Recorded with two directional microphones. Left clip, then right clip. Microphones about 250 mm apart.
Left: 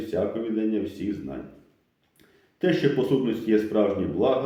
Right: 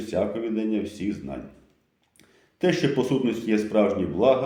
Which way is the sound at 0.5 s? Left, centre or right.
Right.